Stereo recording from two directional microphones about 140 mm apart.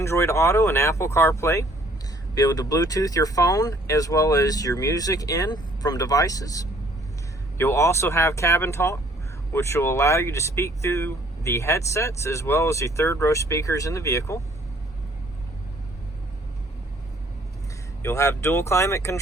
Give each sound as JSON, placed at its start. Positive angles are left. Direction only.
{"t": 0.0, "sound": "speech", "side_deg": 20}
{"t": 18.0, "sound": "speech", "side_deg": 20}